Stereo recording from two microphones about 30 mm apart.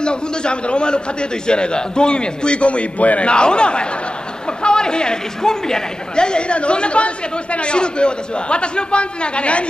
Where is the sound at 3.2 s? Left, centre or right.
Left.